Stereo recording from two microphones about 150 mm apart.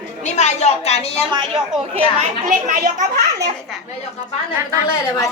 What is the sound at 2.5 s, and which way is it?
Speech, 60° right (ahead or behind).